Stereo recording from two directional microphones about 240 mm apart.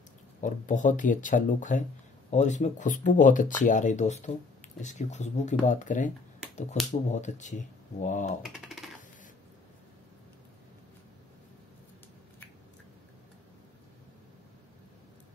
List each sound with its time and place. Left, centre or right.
0.4 s speech: left
8.4 s typewriter: centre